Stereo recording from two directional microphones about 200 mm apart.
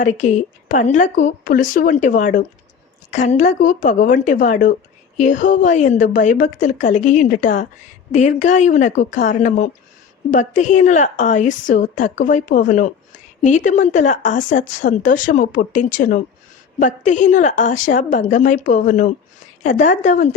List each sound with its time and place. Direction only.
0.0 s a woman's voice: 35° left (ahead or behind)